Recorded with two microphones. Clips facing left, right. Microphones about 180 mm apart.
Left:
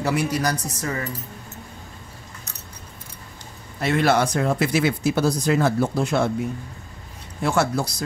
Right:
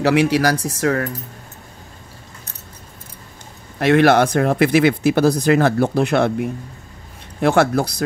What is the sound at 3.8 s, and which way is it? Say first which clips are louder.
Speech: right 7 dB; 70° right (ahead or behind).